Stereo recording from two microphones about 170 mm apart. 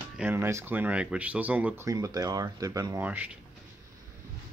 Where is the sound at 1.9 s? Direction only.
20° right (ahead or behind).